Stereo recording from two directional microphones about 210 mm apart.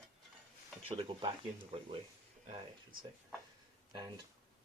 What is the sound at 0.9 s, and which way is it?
Speech, 25° right (ahead or behind).